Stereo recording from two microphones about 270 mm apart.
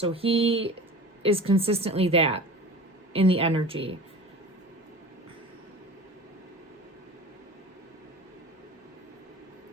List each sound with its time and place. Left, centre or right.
0.0 s a woman's voice: right